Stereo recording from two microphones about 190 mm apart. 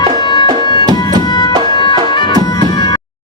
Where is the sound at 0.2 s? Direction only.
25° left (ahead or behind).